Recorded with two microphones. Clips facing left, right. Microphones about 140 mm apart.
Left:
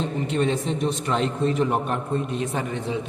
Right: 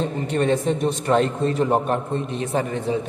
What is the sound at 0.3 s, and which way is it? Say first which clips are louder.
A man's voice: right 4 dB; 45° right (ahead or behind).